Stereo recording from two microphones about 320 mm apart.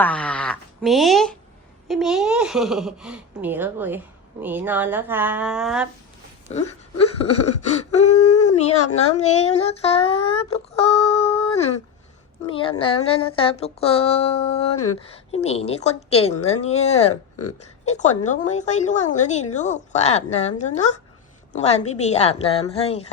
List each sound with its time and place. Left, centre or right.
0.0 s speech: centre
6.5 s a woman's voice: centre
7.9 s a sound: left
9.1 s a woman's voice: centre
12.5 s a sound: centre
15.3 s a woman's voice: centre